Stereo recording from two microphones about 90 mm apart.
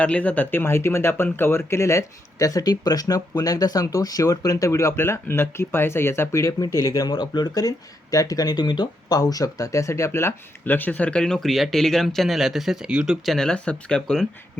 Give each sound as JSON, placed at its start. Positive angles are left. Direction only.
{"t": 0.0, "sound": "speech", "side_deg": 15}
{"t": 13.2, "sound": "speech", "side_deg": 5}